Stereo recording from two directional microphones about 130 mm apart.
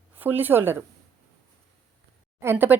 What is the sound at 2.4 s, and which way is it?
Speech, 15° right (ahead or behind).